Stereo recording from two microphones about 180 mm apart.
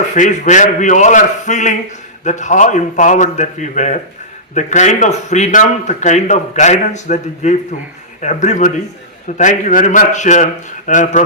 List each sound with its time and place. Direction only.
0.1 s a man's voice: 45° left (ahead or behind)